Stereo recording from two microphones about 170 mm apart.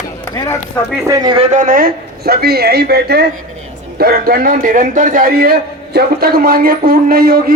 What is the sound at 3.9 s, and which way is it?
A man's voice, 65° right (ahead or behind).